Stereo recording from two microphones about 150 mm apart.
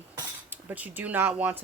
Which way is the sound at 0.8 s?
10° right (ahead or behind).